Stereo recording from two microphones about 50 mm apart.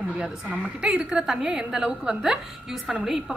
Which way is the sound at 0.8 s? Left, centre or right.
Centre.